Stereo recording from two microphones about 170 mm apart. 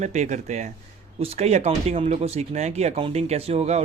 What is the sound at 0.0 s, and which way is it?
Speech, 45° right (ahead or behind).